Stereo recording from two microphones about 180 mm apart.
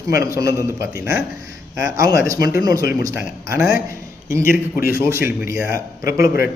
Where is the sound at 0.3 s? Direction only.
15° right (ahead or behind).